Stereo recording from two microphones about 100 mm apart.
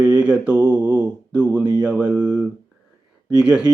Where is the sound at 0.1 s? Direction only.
10° right (ahead or behind).